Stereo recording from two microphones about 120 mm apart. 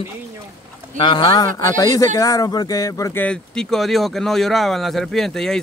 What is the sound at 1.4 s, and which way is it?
Speech, 30° left (ahead or behind).